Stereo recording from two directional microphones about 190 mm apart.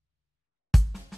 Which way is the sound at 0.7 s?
Centre (ahead or behind).